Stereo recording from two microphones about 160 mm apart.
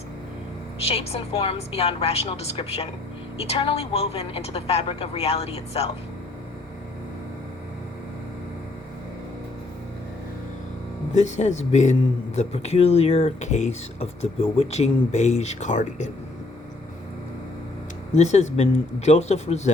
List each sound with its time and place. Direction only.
0.9 s a woman's voice: 40° left (ahead or behind)
11.1 s speech: 45° left (ahead or behind)
18.1 s speech: 45° left (ahead or behind)